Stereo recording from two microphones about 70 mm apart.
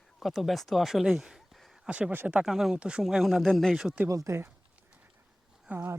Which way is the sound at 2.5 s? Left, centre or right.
Centre.